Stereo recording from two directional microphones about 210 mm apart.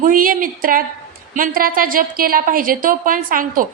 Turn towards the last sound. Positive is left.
turn(degrees=-40)  # may be behind; listen again after turning